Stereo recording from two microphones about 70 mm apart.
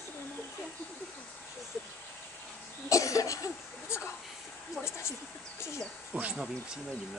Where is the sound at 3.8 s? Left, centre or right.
Left.